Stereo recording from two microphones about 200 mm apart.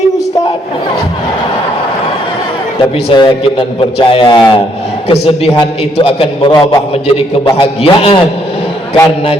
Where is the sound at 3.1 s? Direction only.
25° left (ahead or behind).